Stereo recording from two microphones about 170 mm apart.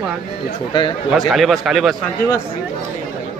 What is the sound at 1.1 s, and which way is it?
Speech, centre (ahead or behind).